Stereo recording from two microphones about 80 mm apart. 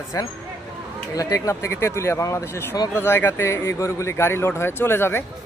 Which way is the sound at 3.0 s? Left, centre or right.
Left.